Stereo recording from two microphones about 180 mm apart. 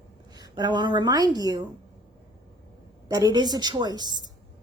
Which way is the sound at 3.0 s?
20° right (ahead or behind).